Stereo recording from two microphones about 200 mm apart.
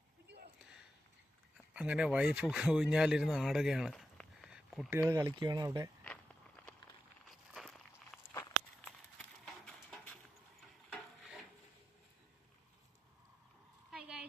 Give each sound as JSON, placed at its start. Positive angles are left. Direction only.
{"t": 1.5, "sound": "speech", "side_deg": -5}
{"t": 7.3, "sound": "walk", "side_deg": 0}
{"t": 8.2, "sound": "walk", "side_deg": 15}
{"t": 10.8, "sound": "wood", "side_deg": 0}
{"t": 13.9, "sound": "a sound", "side_deg": 0}